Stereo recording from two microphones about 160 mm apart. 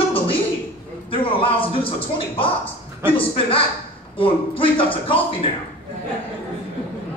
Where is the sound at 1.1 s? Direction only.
35° left (ahead or behind).